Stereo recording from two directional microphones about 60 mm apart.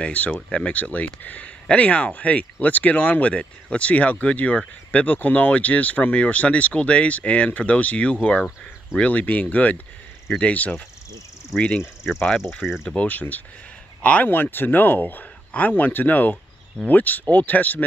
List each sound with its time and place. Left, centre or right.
0.0 s speech: left
11.8 s speech: centre
12.9 s speech: left